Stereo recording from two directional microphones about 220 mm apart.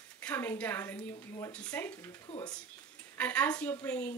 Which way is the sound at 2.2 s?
20° left (ahead or behind).